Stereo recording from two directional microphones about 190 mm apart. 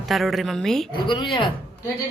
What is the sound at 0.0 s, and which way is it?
Speech, centre (ahead or behind).